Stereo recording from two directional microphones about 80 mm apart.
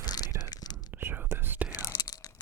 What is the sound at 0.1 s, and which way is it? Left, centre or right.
Whispering, left.